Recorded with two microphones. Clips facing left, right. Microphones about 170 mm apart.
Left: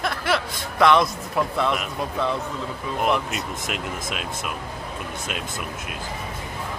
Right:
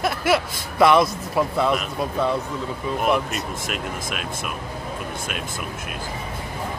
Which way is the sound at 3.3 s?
20° left (ahead or behind).